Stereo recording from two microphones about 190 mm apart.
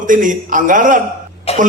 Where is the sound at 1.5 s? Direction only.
35° left (ahead or behind).